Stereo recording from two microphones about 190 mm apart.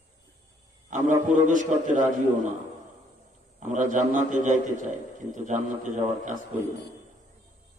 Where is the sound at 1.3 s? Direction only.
40° right (ahead or behind).